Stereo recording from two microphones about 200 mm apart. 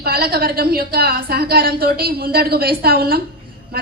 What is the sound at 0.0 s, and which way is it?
A woman's voice, 50° right (ahead or behind).